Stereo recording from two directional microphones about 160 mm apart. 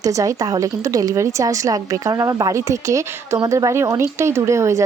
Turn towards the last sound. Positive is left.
turn(degrees=-20)  # may be behind; listen again after turning